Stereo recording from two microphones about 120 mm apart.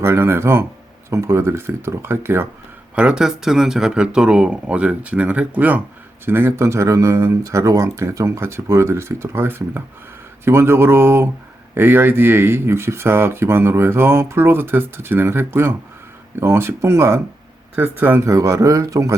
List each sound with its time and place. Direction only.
0.0 s speech: 20° right (ahead or behind)
2.9 s speech: 10° right (ahead or behind)
18.3 s speech: 25° right (ahead or behind)